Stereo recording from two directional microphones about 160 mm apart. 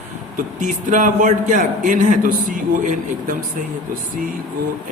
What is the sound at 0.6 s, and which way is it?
A man's voice, 50° right (ahead or behind).